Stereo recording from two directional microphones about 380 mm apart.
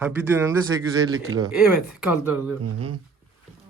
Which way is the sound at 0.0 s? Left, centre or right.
Centre.